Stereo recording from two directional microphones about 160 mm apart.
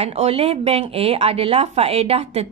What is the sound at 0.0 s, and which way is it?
A woman's voice, 40° right (ahead or behind).